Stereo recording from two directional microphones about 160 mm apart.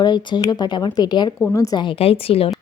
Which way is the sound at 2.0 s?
35° left (ahead or behind).